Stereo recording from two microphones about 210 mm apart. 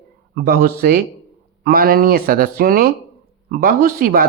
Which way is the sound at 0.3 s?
45° right (ahead or behind).